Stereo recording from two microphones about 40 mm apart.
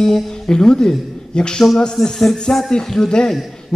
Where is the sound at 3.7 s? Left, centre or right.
Centre.